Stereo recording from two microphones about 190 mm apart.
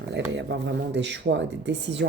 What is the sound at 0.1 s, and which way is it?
Speech, 65° right (ahead or behind).